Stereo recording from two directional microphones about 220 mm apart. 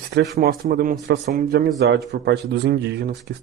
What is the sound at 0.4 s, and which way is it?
Speech, 40° right (ahead or behind).